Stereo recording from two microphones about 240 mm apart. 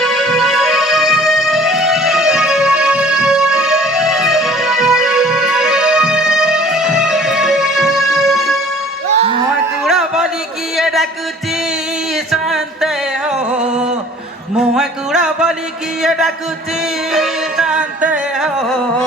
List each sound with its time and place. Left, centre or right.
0.0 s music: centre
9.8 s a sound: centre
10.8 s music: centre
12.1 s music: centre
14.5 s music: centre
16.0 s speech: centre
17.1 s music: centre